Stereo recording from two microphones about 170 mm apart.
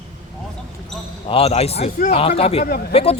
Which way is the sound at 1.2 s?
35° left (ahead or behind).